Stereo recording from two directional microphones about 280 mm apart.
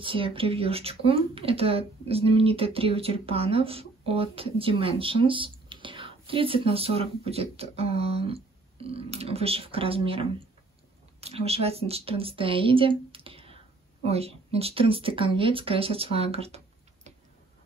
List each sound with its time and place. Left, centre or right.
0.0 s a woman's voice: centre